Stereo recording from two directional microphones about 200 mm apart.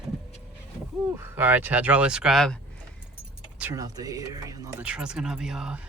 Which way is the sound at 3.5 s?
10° right (ahead or behind).